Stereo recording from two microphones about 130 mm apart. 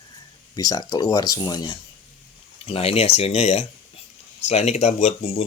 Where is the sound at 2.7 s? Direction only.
50° left (ahead or behind).